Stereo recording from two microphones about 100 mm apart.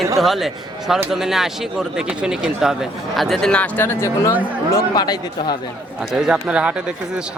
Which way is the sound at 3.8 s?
25° left (ahead or behind).